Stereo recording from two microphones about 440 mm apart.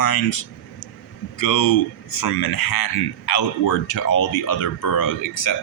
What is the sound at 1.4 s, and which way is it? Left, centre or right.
Speech, left.